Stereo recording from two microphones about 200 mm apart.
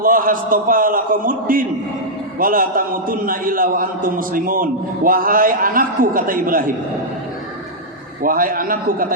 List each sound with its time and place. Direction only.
0.0 s a man's voice: 45° right (ahead or behind)
8.2 s a man's voice: 45° right (ahead or behind)